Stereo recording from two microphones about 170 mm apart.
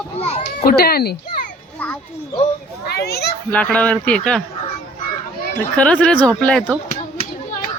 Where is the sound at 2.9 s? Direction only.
70° left (ahead or behind).